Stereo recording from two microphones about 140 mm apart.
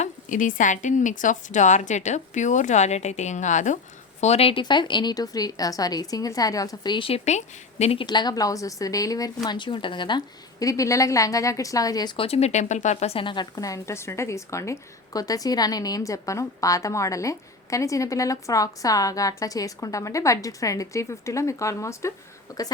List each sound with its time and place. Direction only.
0.0 s a woman's voice: 70° left (ahead or behind)
4.2 s a woman's voice: 45° left (ahead or behind)
4.6 s a woman's voice: 35° left (ahead or behind)
7.3 s a woman's voice: 50° left (ahead or behind)
8.0 s a woman's voice: 30° left (ahead or behind)